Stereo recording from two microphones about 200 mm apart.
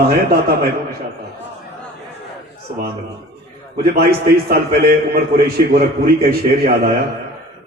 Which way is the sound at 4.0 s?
50° right (ahead or behind).